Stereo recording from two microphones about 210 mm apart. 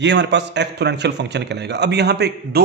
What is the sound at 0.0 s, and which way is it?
A man's voice, 55° right (ahead or behind).